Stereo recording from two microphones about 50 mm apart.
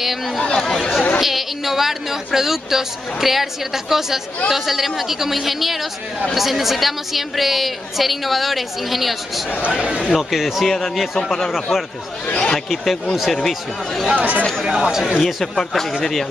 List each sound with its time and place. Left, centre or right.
0.0 s a woman's voice: centre
0.4 s speech: centre
1.2 s a woman's voice: centre
9.7 s speech: centre
10.1 s a woman's voice: centre
11.7 s speech: centre
12.3 s speech: left
12.5 s a woman's voice: centre
14.1 s speech: right
14.7 s speech: centre
15.1 s a woman's voice: centre